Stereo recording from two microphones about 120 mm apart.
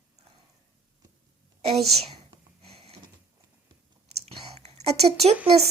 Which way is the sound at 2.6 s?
55° right (ahead or behind).